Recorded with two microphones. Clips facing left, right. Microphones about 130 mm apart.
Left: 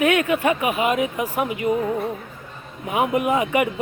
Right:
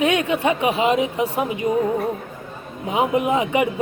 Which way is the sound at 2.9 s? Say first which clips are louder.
Right 1 dB; 25° right (ahead or behind).